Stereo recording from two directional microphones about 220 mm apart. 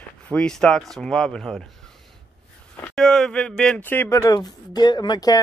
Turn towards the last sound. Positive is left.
turn(degrees=15)  # may be behind; listen again after turning